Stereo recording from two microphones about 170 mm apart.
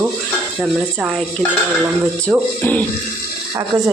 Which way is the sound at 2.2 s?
10° left (ahead or behind).